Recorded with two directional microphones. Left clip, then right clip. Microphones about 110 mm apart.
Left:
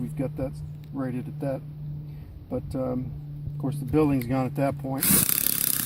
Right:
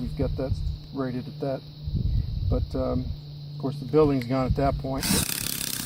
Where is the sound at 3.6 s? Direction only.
25° right (ahead or behind).